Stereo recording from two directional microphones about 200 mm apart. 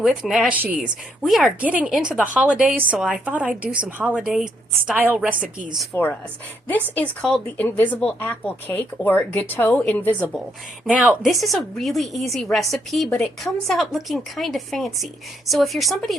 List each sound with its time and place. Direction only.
0.0 s a woman's voice: 5° right (ahead or behind)
5.9 s speech: 10° left (ahead or behind)
10.8 s a woman's voice: 5° right (ahead or behind)